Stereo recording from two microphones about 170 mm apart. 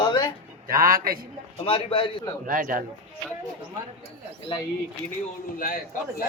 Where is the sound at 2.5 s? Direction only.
55° right (ahead or behind).